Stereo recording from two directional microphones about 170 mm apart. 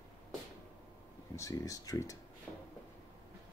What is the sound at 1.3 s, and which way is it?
Speech, 20° left (ahead or behind).